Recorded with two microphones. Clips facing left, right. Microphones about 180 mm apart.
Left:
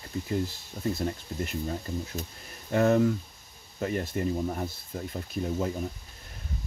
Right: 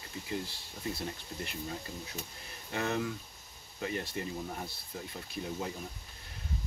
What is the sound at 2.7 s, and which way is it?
Speech, 45° left (ahead or behind).